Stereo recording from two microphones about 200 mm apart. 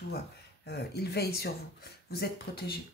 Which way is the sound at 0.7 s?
55° left (ahead or behind).